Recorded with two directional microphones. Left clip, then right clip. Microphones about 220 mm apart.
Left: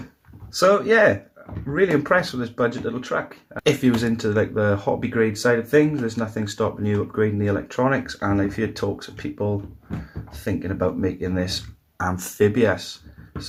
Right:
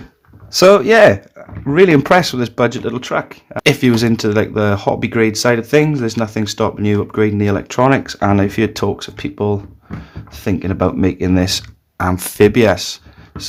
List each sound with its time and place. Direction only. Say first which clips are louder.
0.5 s speech: right 8 dB; 45° right (ahead or behind)
11.9 s speech: right 8 dB; 35° right (ahead or behind)